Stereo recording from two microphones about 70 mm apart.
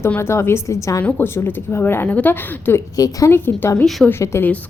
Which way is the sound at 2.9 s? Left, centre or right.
Left.